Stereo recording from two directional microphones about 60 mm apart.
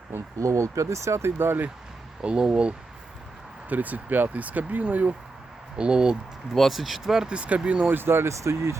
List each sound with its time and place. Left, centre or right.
0.3 s speech: right
2.2 s speech: centre
6.5 s speech: centre
7.9 s speech: right